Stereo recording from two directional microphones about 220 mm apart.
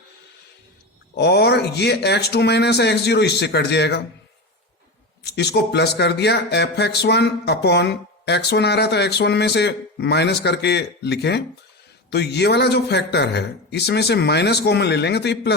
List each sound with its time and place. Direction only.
1.1 s speech: 50° left (ahead or behind)
5.2 s speech: 50° left (ahead or behind)